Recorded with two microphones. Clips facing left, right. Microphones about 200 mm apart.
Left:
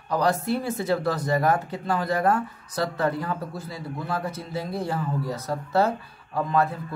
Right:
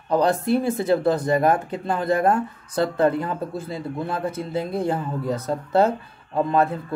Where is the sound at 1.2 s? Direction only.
25° right (ahead or behind).